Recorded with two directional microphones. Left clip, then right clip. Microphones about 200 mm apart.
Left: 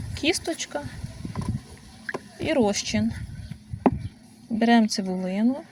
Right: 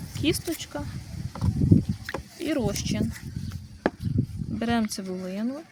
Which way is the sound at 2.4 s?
20° left (ahead or behind).